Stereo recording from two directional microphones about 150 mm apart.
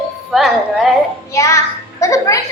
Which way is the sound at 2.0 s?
20° left (ahead or behind).